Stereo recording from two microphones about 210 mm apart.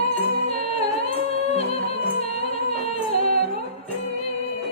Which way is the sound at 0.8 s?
30° left (ahead or behind).